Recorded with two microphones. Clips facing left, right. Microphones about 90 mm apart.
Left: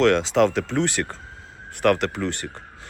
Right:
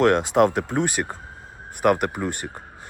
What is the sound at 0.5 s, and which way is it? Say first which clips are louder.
Speech: even; 15° right (ahead or behind).